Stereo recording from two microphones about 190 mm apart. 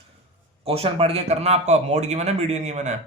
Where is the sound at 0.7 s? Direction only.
30° right (ahead or behind).